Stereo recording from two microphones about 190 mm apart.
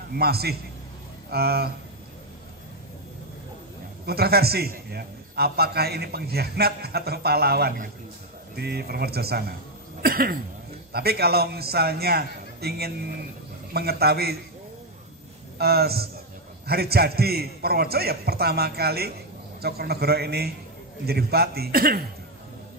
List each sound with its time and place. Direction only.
0.1 s a man's voice: 55° right (ahead or behind)
4.0 s a man's voice: 55° right (ahead or behind)
10.0 s a sound: 50° right (ahead or behind)
10.9 s a man's voice: 55° right (ahead or behind)
15.5 s a man's voice: 55° right (ahead or behind)